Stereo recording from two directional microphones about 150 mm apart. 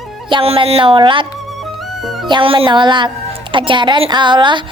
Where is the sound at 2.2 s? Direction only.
35° right (ahead or behind).